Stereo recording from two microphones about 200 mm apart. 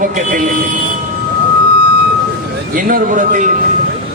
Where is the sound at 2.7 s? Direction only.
45° right (ahead or behind).